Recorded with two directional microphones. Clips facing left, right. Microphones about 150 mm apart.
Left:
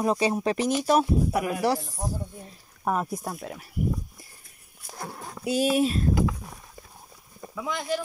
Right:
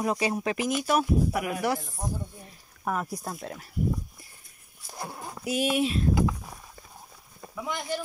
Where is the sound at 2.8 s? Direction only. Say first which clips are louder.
Left 3 dB; 30° left (ahead or behind).